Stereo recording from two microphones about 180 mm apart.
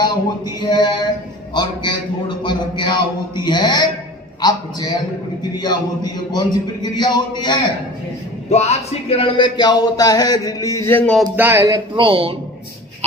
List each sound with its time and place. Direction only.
0.0 s speech: 25° left (ahead or behind)
8.4 s speech: 40° left (ahead or behind); by 11.3 s 5° left (ahead or behind)
11.3 s speech: 15° right (ahead or behind); by 12.4 s 30° right (ahead or behind)